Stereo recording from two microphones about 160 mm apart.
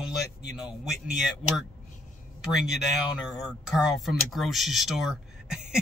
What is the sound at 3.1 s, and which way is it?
Speech, 5° right (ahead or behind).